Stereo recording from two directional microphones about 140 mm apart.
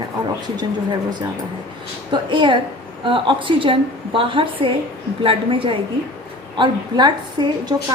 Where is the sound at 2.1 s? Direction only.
35° right (ahead or behind).